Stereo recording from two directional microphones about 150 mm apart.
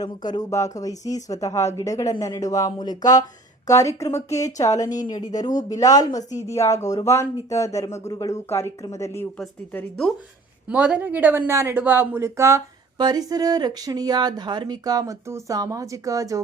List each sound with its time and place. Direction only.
0.0 s speech: 30° left (ahead or behind)
10.7 s speech: 10° right (ahead or behind)